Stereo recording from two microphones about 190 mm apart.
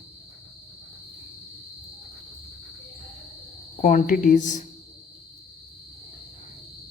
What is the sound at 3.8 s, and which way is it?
Speech, 40° left (ahead or behind).